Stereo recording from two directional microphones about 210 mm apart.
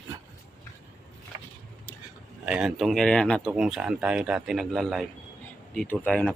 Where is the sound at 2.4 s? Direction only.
5° right (ahead or behind).